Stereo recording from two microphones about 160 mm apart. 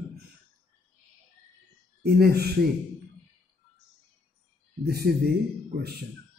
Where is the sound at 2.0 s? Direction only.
90° right.